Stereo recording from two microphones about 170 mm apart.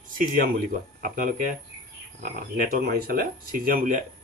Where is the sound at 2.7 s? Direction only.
60° right (ahead or behind).